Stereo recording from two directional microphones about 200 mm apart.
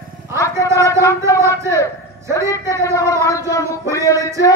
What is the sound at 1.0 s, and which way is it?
Speech, 15° left (ahead or behind).